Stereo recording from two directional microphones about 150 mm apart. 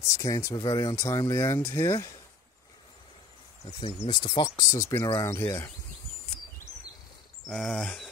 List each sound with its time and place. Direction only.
0.1 s speech: 20° left (ahead or behind)
4.1 s speech: 30° left (ahead or behind)
7.4 s speech: 5° left (ahead or behind)